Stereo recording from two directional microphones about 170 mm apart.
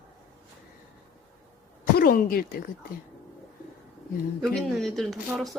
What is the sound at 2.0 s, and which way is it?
Speech, 60° left (ahead or behind).